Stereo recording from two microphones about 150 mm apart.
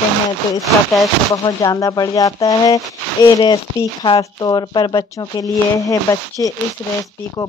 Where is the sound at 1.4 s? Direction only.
25° left (ahead or behind).